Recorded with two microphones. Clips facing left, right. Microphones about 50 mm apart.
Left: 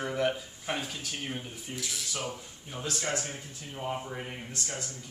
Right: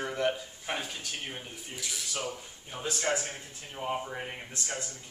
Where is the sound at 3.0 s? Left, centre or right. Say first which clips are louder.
Right 4 dB; right.